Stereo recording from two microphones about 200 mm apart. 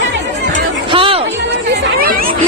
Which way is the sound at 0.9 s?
25° right (ahead or behind).